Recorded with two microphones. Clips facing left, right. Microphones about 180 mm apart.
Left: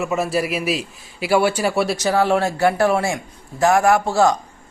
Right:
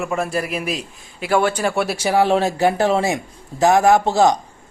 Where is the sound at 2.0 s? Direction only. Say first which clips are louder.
Right 3 dB; 15° right (ahead or behind).